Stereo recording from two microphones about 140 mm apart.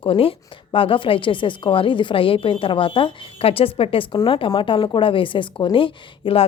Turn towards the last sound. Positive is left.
turn(degrees=40)  # may be behind; listen again after turning